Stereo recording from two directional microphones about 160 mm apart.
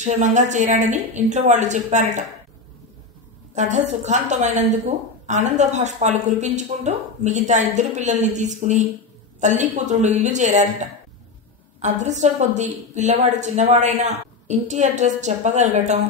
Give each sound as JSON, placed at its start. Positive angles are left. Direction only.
{"t": 0.0, "sound": "a woman's voice", "side_deg": -50}
{"t": 3.5, "sound": "a woman's voice", "side_deg": -50}